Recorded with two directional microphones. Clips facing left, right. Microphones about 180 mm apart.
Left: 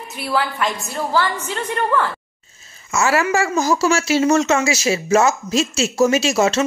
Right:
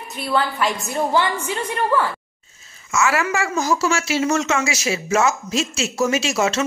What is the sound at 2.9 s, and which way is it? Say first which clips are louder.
Speech: left 2 dB; 35° left (ahead or behind).